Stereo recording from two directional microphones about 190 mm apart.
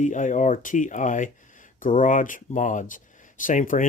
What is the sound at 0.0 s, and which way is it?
Speech, 40° left (ahead or behind).